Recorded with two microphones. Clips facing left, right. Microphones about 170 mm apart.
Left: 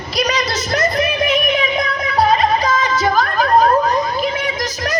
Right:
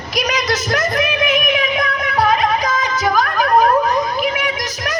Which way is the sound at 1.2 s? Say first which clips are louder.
Left 1 dB; 35° left (ahead or behind).